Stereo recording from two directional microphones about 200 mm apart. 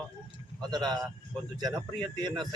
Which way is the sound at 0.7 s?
20° right (ahead or behind).